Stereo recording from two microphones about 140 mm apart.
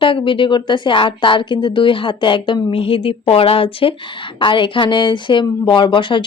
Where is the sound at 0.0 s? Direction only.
35° left (ahead or behind).